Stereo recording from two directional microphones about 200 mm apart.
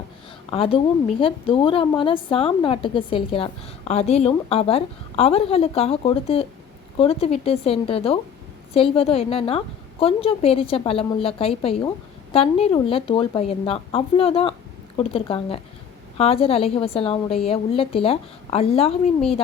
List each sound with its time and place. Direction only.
0.5 s a woman's voice: 30° left (ahead or behind)